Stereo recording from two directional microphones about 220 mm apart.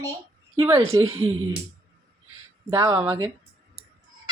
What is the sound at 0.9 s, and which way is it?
Speech, 15° right (ahead or behind).